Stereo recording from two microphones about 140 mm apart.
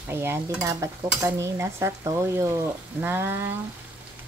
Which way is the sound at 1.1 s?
20° right (ahead or behind).